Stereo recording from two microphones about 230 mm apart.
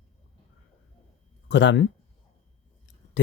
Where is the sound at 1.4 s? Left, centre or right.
Left.